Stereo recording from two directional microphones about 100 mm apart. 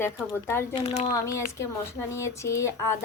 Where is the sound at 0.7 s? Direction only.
75° left (ahead or behind).